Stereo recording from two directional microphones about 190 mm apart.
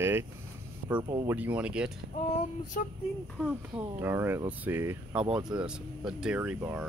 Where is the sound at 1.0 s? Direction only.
25° right (ahead or behind).